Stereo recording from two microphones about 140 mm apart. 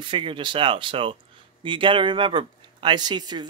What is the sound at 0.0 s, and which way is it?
Speech, 35° right (ahead or behind).